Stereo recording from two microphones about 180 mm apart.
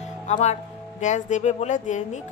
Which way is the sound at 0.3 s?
40° left (ahead or behind).